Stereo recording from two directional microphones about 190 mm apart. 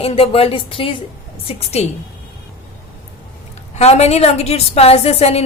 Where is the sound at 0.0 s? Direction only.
30° left (ahead or behind).